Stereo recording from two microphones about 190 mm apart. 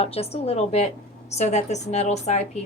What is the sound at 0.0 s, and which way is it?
A woman's voice, 30° left (ahead or behind).